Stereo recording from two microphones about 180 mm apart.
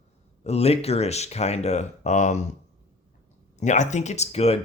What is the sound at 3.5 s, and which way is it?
Speech, 40° left (ahead or behind).